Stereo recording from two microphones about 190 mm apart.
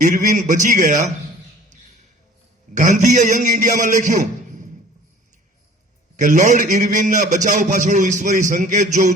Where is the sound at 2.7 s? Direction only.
40° right (ahead or behind).